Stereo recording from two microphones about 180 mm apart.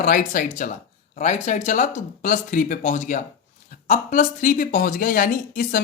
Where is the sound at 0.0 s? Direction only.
50° left (ahead or behind).